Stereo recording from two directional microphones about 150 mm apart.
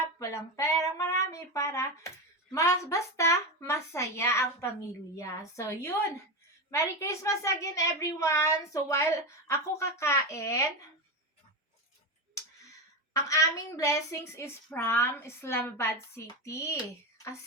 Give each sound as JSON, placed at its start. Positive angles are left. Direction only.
{"t": 0.2, "sound": "a woman's voice", "side_deg": 20}
{"t": 13.1, "sound": "a woman's voice", "side_deg": 20}